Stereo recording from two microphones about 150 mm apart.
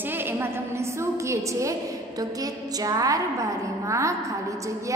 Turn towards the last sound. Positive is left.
turn(degrees=-20)  # may be behind; listen again after turning